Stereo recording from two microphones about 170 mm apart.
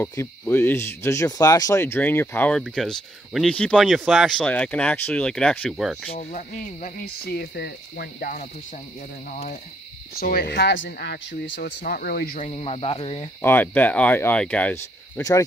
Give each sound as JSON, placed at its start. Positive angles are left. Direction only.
{"t": 0.0, "sound": "speech", "side_deg": 15}
{"t": 6.3, "sound": "speech", "side_deg": 55}
{"t": 9.3, "sound": "owl", "side_deg": 55}
{"t": 10.2, "sound": "speech", "side_deg": 70}
{"t": 12.4, "sound": "speech", "side_deg": 40}
{"t": 13.4, "sound": "speech", "side_deg": 10}